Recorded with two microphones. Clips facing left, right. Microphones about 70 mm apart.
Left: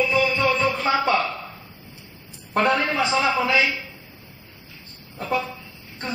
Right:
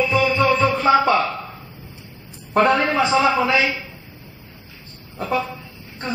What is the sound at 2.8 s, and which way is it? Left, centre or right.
Speech, right.